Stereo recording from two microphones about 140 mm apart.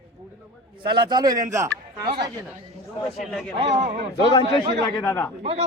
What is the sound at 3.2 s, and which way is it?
Speech, centre (ahead or behind).